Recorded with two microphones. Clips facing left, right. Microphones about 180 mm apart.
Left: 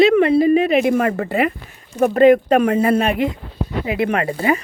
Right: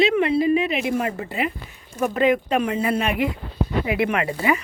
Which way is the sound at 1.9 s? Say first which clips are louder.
Left 8 dB; 45° left (ahead or behind).